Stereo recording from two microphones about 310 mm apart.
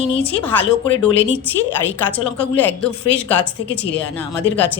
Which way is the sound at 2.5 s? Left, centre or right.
Centre.